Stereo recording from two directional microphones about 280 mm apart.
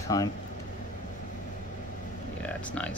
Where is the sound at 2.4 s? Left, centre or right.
Centre.